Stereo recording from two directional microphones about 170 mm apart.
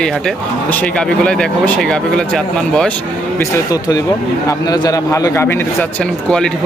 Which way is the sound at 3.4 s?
20° left (ahead or behind).